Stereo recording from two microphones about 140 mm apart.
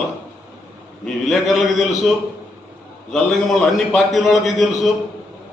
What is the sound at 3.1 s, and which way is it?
A man's voice, 5° left (ahead or behind).